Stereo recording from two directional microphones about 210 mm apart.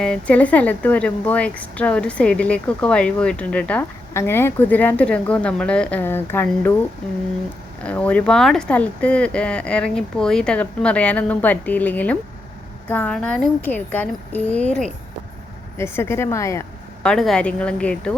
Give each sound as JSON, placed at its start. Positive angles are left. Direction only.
{"t": 0.0, "sound": "a woman's voice", "side_deg": 5}
{"t": 7.9, "sound": "a woman's voice", "side_deg": 5}
{"t": 17.1, "sound": "speech", "side_deg": 0}